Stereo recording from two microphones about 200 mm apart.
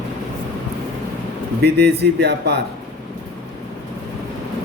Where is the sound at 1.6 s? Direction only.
55° right (ahead or behind).